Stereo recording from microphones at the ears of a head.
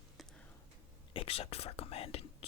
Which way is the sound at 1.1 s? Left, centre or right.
Left.